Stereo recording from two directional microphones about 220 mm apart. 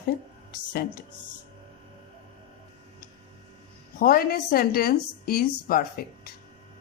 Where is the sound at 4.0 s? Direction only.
40° left (ahead or behind).